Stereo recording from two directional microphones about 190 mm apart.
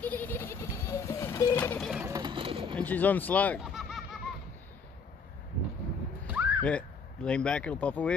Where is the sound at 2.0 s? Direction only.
20° right (ahead or behind).